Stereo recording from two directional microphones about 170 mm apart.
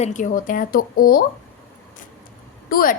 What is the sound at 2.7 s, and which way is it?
Speech, 55° left (ahead or behind).